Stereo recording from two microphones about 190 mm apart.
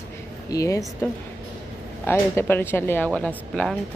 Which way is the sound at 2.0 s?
10° left (ahead or behind).